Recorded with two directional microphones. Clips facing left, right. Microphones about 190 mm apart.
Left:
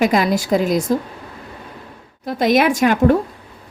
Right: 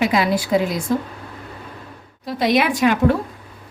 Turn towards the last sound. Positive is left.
turn(degrees=45)  # may be behind; listen again after turning